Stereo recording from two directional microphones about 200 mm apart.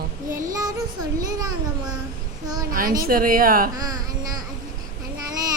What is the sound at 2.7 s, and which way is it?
Speech, 45° right (ahead or behind).